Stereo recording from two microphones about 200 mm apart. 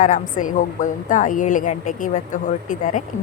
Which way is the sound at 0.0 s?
40° left (ahead or behind).